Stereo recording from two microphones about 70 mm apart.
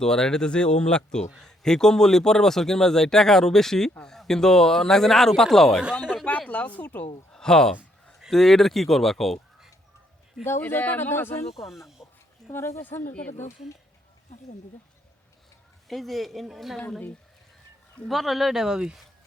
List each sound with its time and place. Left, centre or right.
0.0 s speech: centre
6.5 s a woman's voice: left
7.3 s speech: centre
10.6 s speech: left
12.0 s a sound: centre
12.5 s speech: left
15.9 s speech: centre
18.1 s speech: centre